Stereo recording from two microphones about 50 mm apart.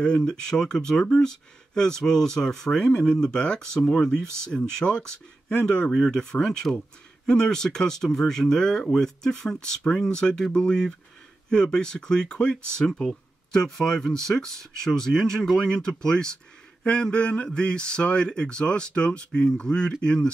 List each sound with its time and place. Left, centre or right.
0.0 s speech: centre